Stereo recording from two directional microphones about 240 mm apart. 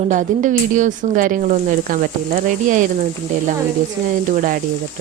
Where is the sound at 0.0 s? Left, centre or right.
Right.